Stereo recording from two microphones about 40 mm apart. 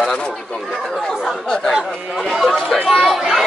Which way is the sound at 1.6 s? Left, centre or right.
Centre.